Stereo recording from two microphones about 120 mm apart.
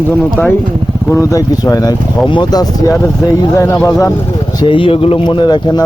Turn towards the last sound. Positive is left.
turn(degrees=40)  # may be behind; listen again after turning